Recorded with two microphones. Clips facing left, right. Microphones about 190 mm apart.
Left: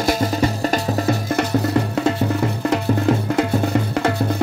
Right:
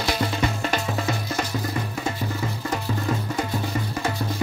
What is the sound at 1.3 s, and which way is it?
Music, 70° left (ahead or behind).